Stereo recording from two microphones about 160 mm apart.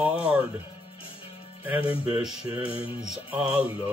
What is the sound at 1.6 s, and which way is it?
Speech, 10° right (ahead or behind).